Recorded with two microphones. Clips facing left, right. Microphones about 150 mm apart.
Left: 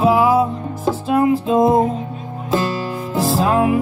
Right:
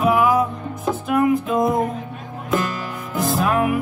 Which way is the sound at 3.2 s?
30° left (ahead or behind).